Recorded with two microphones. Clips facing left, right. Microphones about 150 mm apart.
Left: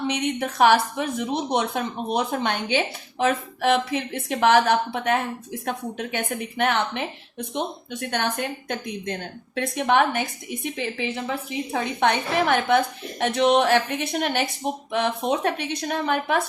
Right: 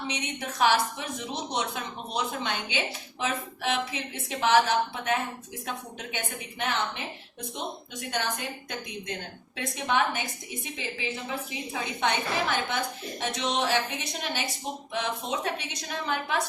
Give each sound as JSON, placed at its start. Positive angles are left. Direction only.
{"t": 0.1, "sound": "a woman's voice", "side_deg": 60}
{"t": 8.1, "sound": "a woman's voice", "side_deg": 60}
{"t": 9.6, "sound": "a woman's voice", "side_deg": 60}